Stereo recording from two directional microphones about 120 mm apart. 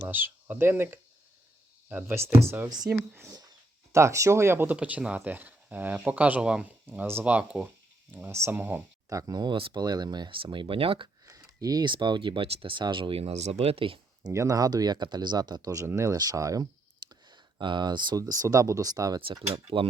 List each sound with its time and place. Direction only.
0.0 s speech: 15° right (ahead or behind)
2.6 s speech: 35° right (ahead or behind); by 8.8 s 15° right (ahead or behind)
9.0 s speech: 30° right (ahead or behind); by 11.1 s 45° right (ahead or behind)
11.3 s speech: 30° right (ahead or behind); by 14.0 s 50° right (ahead or behind)
14.3 s speech: 30° right (ahead or behind)
17.1 s speech: 40° right (ahead or behind)